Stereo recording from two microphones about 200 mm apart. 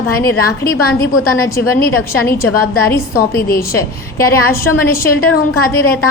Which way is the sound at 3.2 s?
45° left (ahead or behind).